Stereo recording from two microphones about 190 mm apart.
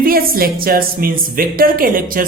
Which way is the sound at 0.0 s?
50° right (ahead or behind).